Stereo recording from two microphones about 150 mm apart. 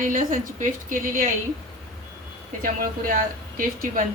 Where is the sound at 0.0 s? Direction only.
65° right (ahead or behind).